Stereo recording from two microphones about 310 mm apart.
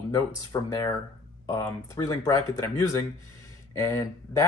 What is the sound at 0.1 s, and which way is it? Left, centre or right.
Speech, centre.